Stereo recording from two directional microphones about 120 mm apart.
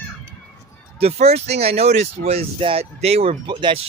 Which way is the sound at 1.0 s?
60° right (ahead or behind).